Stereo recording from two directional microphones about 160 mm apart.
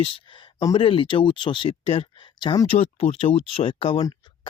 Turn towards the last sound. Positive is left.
turn(degrees=35)  # may be behind; listen again after turning